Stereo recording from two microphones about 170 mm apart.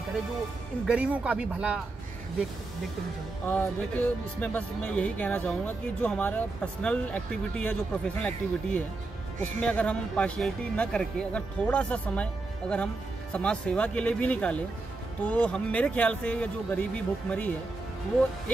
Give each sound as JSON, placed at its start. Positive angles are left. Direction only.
{"t": 0.8, "sound": "speech", "side_deg": -10}
{"t": 3.4, "sound": "speech", "side_deg": 10}